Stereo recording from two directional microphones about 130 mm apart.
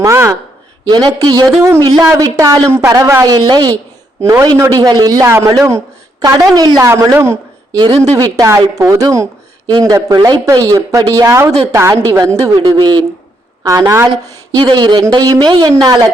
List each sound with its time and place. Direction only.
0.0 s speech: 25° right (ahead or behind)
4.2 s speech: 20° right (ahead or behind)
12.6 s speech: 35° right (ahead or behind)
13.6 s speech: 20° right (ahead or behind)
14.5 s speech: 35° right (ahead or behind)